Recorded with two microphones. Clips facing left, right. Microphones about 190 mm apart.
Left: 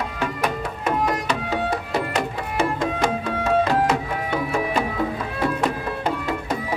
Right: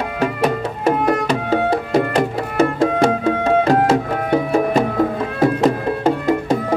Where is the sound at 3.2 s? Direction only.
55° right (ahead or behind).